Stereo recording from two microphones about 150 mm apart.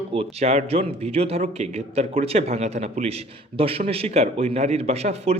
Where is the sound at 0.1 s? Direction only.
45° right (ahead or behind).